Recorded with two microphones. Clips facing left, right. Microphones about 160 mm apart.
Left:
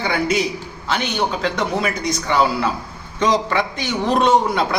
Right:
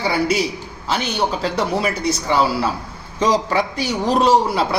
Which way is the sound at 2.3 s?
5° right (ahead or behind).